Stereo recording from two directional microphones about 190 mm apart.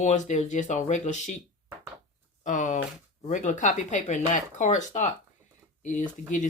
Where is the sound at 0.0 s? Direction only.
40° left (ahead or behind).